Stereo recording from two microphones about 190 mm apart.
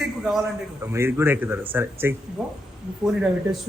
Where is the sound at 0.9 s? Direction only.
10° right (ahead or behind).